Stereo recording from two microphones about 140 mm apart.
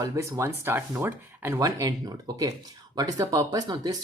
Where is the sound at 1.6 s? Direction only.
25° right (ahead or behind).